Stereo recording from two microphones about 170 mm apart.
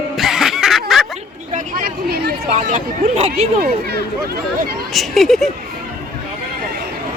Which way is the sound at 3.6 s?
65° right (ahead or behind).